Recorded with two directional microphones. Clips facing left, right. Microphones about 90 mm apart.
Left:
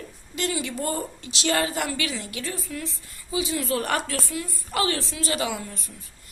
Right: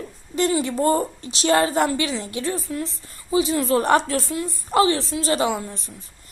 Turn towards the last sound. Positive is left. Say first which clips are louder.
# right 6 dB
turn(degrees=-25)  # may be behind; listen again after turning